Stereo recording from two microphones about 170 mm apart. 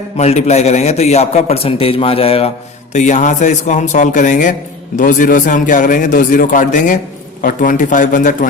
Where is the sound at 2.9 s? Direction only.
45° left (ahead or behind).